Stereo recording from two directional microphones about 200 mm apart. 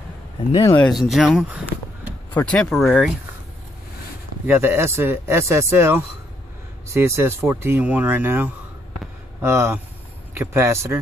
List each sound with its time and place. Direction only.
0.5 s speech: 25° left (ahead or behind)
0.9 s speech: centre (ahead or behind)
2.3 s speech: 5° left (ahead or behind)
4.5 s speech: 10° right (ahead or behind)